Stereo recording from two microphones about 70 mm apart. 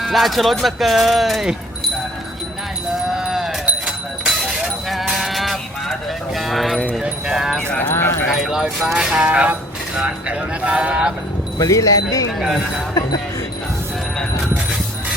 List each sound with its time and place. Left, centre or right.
0.0 s speech: centre
3.2 s sheep: centre
4.3 s a sound: centre
7.0 s speech: centre
7.8 s speech: left
8.4 s speech: centre
11.5 s speech: left
12.4 s speech: centre
12.9 s speech: left